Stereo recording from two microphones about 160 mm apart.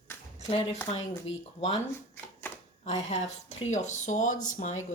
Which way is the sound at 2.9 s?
40° left (ahead or behind).